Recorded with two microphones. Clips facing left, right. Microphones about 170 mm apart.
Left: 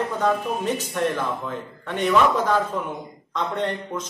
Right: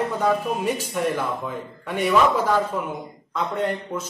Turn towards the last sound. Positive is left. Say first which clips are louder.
# right 1 dB
turn(degrees=-5)  # may be behind; listen again after turning